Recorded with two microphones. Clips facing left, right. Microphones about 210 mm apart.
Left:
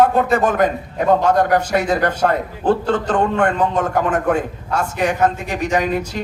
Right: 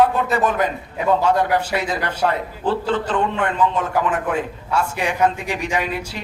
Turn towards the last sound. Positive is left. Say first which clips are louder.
# left 4 dB
turn(degrees=45)  # may be behind; listen again after turning